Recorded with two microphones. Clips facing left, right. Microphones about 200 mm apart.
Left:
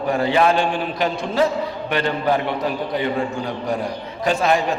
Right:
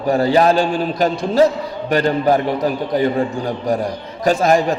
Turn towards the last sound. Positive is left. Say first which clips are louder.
# right 4 dB
turn(degrees=-40)  # may be behind; listen again after turning